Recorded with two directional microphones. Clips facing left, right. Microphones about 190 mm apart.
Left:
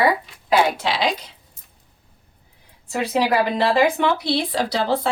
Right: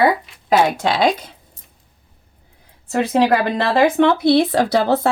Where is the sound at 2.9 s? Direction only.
50° right (ahead or behind).